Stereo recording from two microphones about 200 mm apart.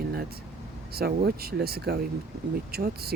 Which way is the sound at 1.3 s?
50° right (ahead or behind).